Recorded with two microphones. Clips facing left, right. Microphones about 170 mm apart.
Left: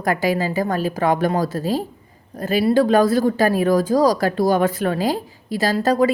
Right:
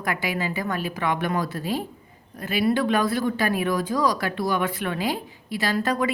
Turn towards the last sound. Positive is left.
turn(degrees=35)  # may be behind; listen again after turning